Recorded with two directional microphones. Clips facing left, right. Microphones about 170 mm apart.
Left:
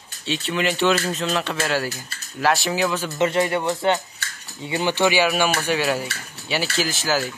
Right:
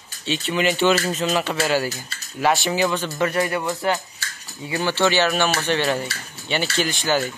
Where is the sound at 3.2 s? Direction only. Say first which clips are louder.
Left 3 dB; 25° left (ahead or behind); by 7.3 s centre (ahead or behind).